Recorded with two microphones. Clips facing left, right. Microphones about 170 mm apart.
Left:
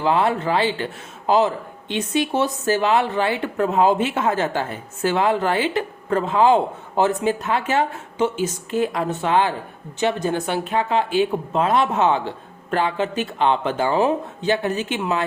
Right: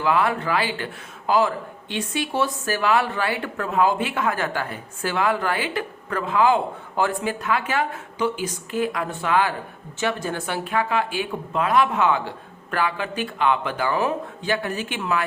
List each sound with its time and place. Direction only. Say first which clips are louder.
0.0 s speech: left 2 dB; 25° left (ahead or behind)